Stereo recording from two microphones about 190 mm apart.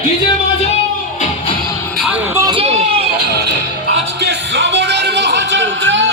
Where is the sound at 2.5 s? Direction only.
30° right (ahead or behind).